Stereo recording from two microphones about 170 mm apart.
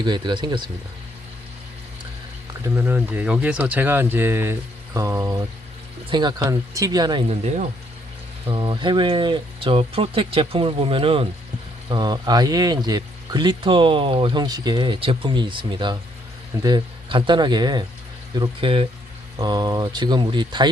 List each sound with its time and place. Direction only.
0.0 s speech: 25° right (ahead or behind)
2.6 s speech: 15° right (ahead or behind)
7.3 s speech: 40° right (ahead or behind)
8.4 s speech: 30° right (ahead or behind)